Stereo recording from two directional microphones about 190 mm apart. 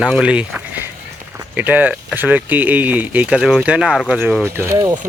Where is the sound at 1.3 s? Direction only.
10° right (ahead or behind).